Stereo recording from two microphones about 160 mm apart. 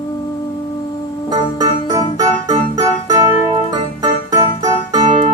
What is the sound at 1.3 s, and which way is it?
Keyboard, 25° right (ahead or behind).